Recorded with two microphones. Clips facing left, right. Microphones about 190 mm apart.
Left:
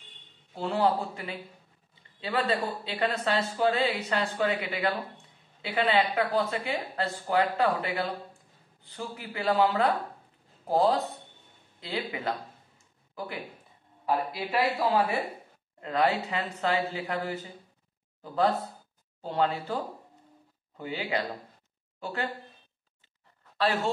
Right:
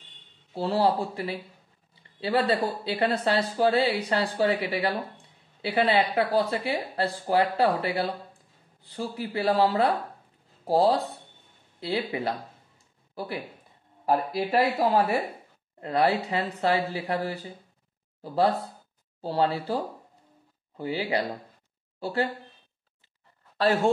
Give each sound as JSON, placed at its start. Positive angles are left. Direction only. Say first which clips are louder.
{"t": 0.6, "sound": "speech", "louder": "right 2 dB", "side_deg": -35}
{"t": 14.0, "sound": "speech", "louder": "right 4 dB", "side_deg": -40}
{"t": 23.6, "sound": "speech", "louder": "right 5 dB", "side_deg": -45}